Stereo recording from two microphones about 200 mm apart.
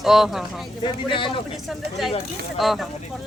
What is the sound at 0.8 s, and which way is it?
Speech, 25° left (ahead or behind).